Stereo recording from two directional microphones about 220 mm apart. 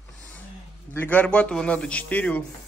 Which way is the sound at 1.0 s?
5° left (ahead or behind).